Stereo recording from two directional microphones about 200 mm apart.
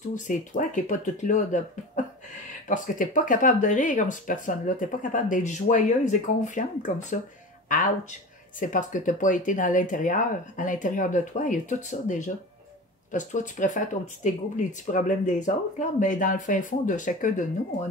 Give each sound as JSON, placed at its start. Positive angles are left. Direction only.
{"t": 0.1, "sound": "speech", "side_deg": 40}
{"t": 2.7, "sound": "speech", "side_deg": 40}